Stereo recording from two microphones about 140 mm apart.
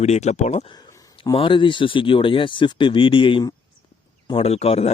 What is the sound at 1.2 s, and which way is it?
Speech, 35° left (ahead or behind).